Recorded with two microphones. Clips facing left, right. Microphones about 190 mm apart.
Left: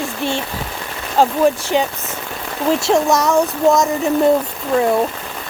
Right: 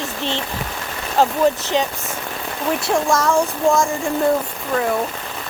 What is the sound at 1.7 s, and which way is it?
A child's voice, 15° left (ahead or behind).